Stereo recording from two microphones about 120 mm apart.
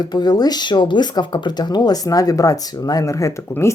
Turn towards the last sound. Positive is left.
turn(degrees=25)  # may be behind; listen again after turning